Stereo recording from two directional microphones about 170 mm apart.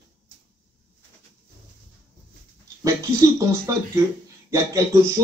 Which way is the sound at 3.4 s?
20° right (ahead or behind).